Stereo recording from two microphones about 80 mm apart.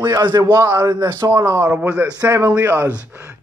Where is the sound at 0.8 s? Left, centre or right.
Right.